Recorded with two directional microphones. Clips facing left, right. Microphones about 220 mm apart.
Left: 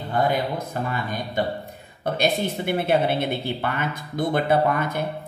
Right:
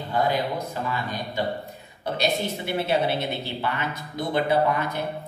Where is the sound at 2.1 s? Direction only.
50° left (ahead or behind).